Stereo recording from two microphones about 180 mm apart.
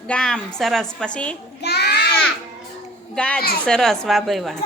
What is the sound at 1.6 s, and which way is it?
Child singing, 65° left (ahead or behind).